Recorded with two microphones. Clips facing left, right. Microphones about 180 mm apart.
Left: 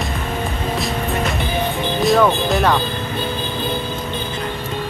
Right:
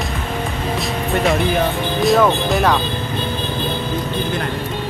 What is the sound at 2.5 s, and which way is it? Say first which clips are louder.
Speech: even; centre (ahead or behind).